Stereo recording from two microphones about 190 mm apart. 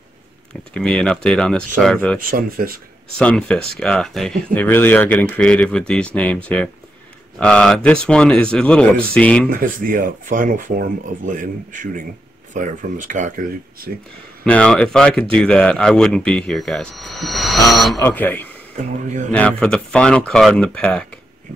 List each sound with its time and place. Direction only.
0.7 s speech: 5° left (ahead or behind)
2.1 s speech: 45° right (ahead or behind)
3.2 s speech: 5° left (ahead or behind)
9.5 s speech: 45° right (ahead or behind)
14.4 s speech: 5° left (ahead or behind)
17.9 s speech: 10° left (ahead or behind)
18.8 s speech: 40° right (ahead or behind)
19.3 s speech: 5° left (ahead or behind)